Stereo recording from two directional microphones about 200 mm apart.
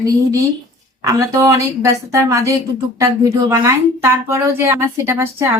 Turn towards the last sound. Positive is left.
turn(degrees=-15)  # may be behind; listen again after turning